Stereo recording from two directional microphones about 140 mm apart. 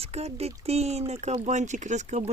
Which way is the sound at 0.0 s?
45° right (ahead or behind).